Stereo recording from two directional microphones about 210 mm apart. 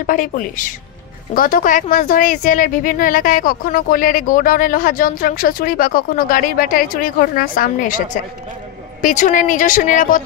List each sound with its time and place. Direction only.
0.0 s speech: 40° left (ahead or behind)